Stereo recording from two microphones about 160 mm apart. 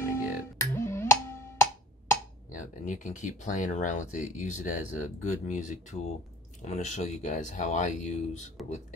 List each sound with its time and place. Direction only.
0.0 s music: 15° left (ahead or behind)
2.5 s speech: 50° left (ahead or behind)